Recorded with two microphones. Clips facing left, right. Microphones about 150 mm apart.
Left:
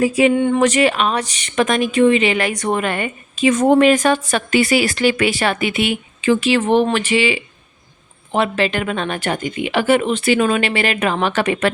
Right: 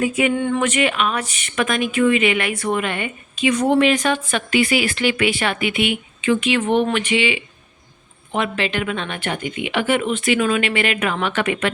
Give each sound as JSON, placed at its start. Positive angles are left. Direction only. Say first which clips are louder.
{"t": 0.0, "sound": "speech", "louder": "left 5 dB", "side_deg": 35}
{"t": 0.3, "sound": "speech", "louder": "left 4 dB", "side_deg": 20}
{"t": 0.6, "sound": "speech", "louder": "left 4 dB", "side_deg": 35}